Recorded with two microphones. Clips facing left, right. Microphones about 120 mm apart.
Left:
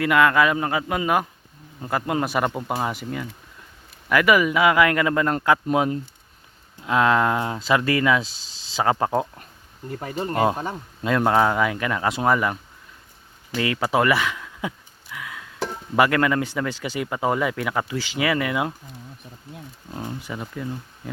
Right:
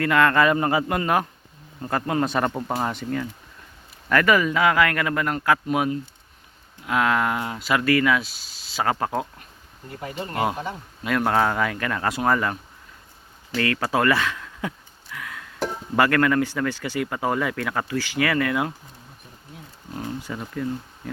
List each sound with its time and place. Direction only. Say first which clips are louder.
0.0 s a man's voice: left 1 dB; 10° left (ahead or behind)
6.8 s speech: left 3 dB; 25° left (ahead or behind)
11.1 s speech: left 2 dB; 20° left (ahead or behind)
15.1 s music: left 1 dB; 15° left (ahead or behind)
16.0 s speech: even; 20° left (ahead or behind)
19.9 s speech: right 1 dB; 20° left (ahead or behind)